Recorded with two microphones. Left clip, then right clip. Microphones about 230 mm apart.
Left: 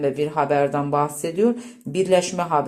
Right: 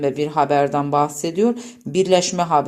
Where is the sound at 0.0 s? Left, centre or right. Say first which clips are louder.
Right 3 dB; right.